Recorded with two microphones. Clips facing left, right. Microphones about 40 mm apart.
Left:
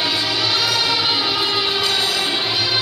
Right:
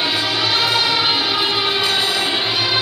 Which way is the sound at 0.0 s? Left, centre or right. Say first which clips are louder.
Right 1 dB; right.